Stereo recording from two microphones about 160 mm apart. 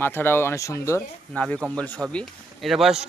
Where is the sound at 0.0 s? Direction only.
15° left (ahead or behind).